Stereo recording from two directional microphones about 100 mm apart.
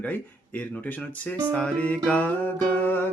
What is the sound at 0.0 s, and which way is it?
Speech, 15° left (ahead or behind).